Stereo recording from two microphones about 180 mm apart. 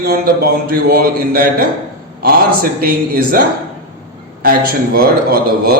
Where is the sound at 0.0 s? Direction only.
60° right (ahead or behind).